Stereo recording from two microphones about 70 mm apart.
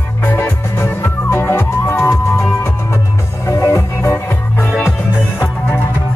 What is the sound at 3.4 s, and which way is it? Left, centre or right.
Music, left.